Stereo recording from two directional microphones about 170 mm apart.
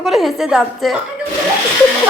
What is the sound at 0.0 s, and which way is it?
Speech, centre (ahead or behind).